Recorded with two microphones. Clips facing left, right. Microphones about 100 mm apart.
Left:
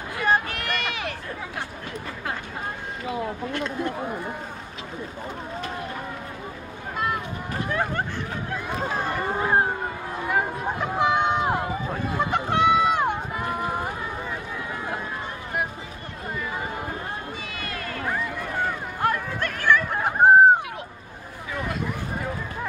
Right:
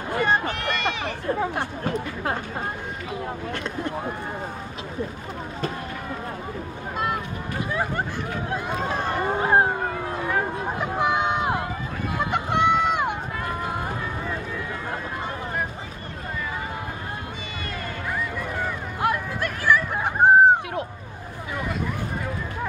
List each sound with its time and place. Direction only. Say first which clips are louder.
0.2 s speech: left 1 dB; centre (ahead or behind)
1.3 s speech: right 8 dB; 40° right (ahead or behind)
7.7 s speech: left 1 dB; 5° right (ahead or behind)
9.0 s speech: right 2 dB; 20° right (ahead or behind)
10.8 s a sound: left 1 dB; centre (ahead or behind)
12.3 s run: even; centre (ahead or behind)
18.9 s a sound: right 1 dB; 10° right (ahead or behind)